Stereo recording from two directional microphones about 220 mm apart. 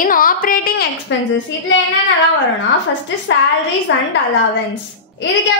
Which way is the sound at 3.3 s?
55° left (ahead or behind).